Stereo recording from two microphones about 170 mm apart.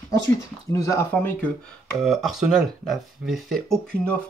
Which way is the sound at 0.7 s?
15° left (ahead or behind).